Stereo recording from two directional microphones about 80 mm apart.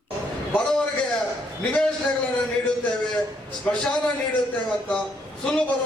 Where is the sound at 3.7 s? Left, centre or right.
Centre.